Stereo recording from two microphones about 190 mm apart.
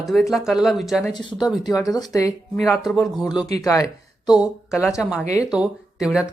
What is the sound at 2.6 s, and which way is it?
Speech, centre (ahead or behind).